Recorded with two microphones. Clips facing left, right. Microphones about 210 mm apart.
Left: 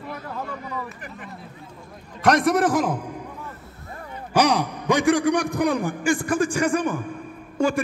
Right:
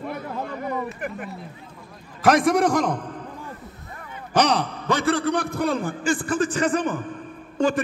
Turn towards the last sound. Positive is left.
turn(degrees=10)  # may be behind; listen again after turning